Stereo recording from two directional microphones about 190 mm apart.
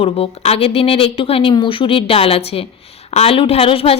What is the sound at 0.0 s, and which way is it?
A woman's voice, 30° left (ahead or behind).